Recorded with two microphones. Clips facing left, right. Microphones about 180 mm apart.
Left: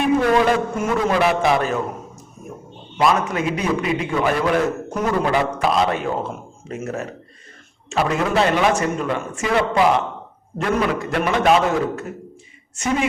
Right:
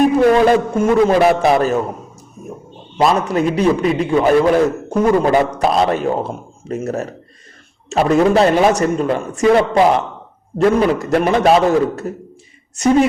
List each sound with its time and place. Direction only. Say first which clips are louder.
0.0 s a man's voice: right 5 dB; 35° right (ahead or behind)
3.0 s a man's voice: right 4 dB; 35° right (ahead or behind)